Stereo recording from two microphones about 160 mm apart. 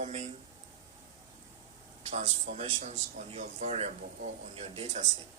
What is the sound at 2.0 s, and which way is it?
Speech, 45° right (ahead or behind).